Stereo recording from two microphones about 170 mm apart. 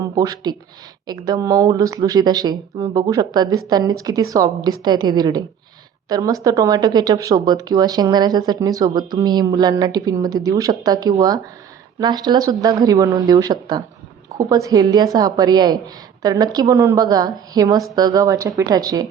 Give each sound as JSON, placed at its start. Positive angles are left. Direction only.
{"t": 0.2, "sound": "speech", "side_deg": -20}